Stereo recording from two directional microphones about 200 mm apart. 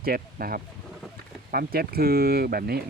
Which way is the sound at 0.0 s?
50° right (ahead or behind).